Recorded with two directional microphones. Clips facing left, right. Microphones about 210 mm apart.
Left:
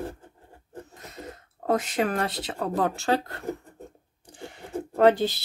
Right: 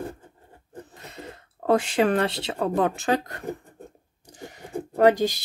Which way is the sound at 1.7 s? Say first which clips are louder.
Right 4 dB; 30° right (ahead or behind).